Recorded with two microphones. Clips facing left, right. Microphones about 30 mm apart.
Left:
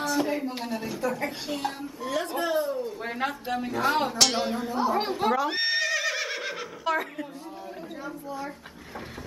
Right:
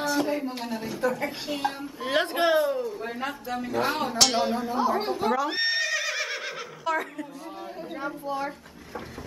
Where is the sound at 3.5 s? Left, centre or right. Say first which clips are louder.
Left 1 dB; centre.